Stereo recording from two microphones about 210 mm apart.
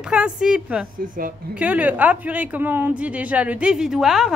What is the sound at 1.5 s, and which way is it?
A woman's voice, 5° right (ahead or behind).